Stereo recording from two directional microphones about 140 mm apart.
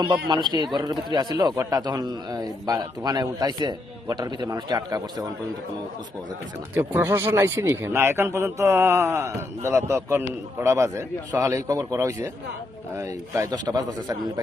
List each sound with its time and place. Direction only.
0.5 s a man's voice: 30° right (ahead or behind)
6.7 s a man's voice: 15° right (ahead or behind)
13.3 s a man's voice: 25° right (ahead or behind)